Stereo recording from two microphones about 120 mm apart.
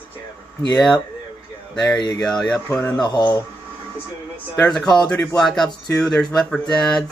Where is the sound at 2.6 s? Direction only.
20° left (ahead or behind).